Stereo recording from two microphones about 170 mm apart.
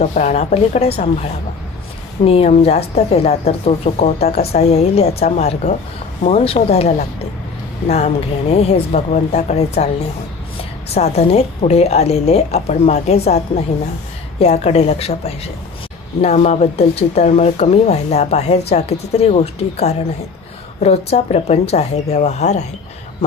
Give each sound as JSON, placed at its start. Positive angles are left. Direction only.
{"t": 0.0, "sound": "a woman's voice", "side_deg": 45}
{"t": 2.2, "sound": "a woman's voice", "side_deg": 35}